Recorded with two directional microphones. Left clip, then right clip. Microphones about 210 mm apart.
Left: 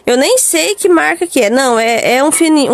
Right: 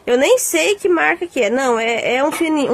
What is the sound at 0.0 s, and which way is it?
Speech, 45° left (ahead or behind).